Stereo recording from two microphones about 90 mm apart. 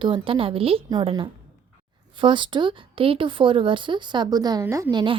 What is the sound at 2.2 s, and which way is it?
Speech, 65° right (ahead or behind).